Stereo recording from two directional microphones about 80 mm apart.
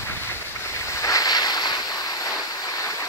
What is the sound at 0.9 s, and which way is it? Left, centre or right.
Waves, left.